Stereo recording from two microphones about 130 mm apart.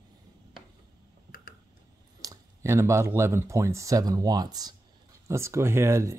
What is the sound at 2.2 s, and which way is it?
Speech, 25° right (ahead or behind).